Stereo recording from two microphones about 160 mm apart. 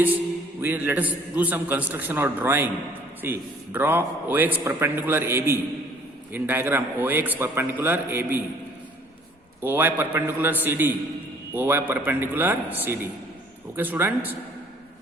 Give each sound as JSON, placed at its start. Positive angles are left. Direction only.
{"t": 0.6, "sound": "a man's voice", "side_deg": -10}
{"t": 9.6, "sound": "a man's voice", "side_deg": -15}